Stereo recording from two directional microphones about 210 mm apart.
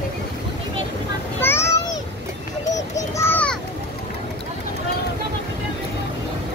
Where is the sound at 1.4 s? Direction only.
10° left (ahead or behind).